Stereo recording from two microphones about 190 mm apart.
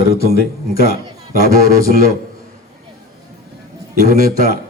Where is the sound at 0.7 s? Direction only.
50° left (ahead or behind).